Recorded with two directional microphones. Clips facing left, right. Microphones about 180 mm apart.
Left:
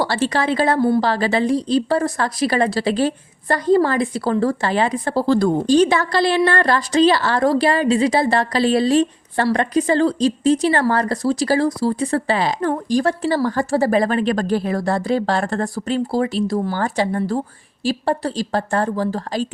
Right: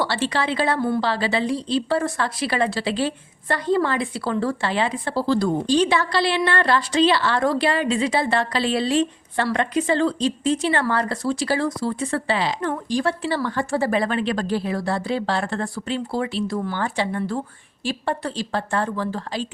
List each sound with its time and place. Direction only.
0.0 s a woman's voice: 40° left (ahead or behind)